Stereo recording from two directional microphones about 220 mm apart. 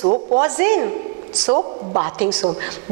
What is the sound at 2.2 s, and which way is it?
Speech, 10° right (ahead or behind).